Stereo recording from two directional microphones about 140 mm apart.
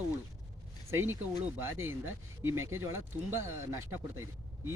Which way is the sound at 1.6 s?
15° right (ahead or behind).